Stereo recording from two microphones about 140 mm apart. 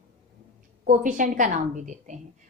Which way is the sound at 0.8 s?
75° right (ahead or behind).